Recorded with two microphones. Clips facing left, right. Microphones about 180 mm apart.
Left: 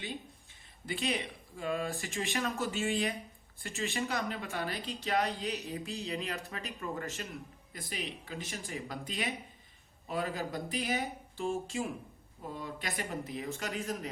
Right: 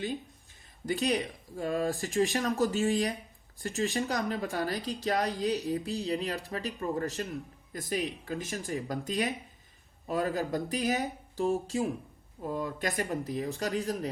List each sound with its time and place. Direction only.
0.9 s a woman's voice: 40° right (ahead or behind)